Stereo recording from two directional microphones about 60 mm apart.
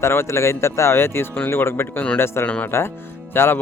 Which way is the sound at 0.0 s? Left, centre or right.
Left.